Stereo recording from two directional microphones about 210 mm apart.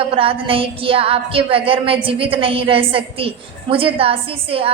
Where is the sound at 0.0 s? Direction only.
25° right (ahead or behind).